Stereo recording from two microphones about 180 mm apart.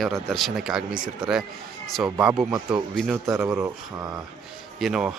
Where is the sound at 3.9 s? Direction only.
20° right (ahead or behind).